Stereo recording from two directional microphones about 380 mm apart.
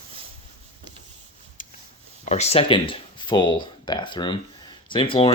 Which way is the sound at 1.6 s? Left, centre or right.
Left.